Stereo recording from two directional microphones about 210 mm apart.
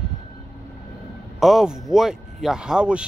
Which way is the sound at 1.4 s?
Centre (ahead or behind).